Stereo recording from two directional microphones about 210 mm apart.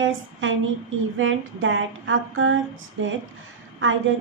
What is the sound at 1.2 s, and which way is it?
A woman's voice, 65° right (ahead or behind).